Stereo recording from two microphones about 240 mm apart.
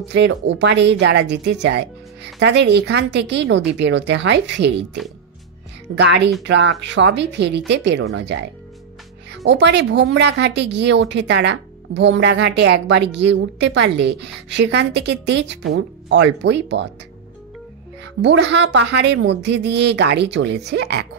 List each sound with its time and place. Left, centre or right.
0.1 s speech: right
5.9 s speech: right
18.2 s speech: right